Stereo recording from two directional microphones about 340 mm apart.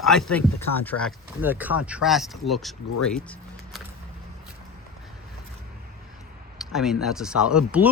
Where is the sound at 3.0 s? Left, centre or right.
Centre.